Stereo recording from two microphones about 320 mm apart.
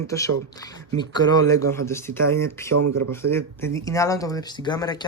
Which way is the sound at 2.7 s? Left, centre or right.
Right.